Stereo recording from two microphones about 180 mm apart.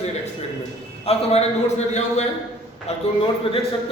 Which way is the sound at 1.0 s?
35° left (ahead or behind).